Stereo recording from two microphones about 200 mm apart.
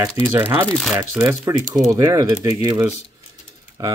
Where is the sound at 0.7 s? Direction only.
Centre (ahead or behind).